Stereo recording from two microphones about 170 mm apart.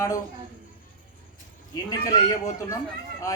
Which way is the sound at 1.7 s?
20° left (ahead or behind).